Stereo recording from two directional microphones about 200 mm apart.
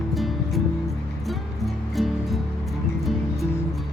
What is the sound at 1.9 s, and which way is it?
Music, centre (ahead or behind).